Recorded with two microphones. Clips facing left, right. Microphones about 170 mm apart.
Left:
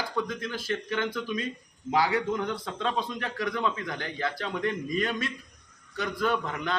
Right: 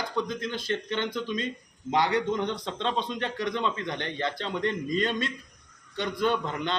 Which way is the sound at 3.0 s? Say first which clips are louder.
Right 2 dB; 25° right (ahead or behind).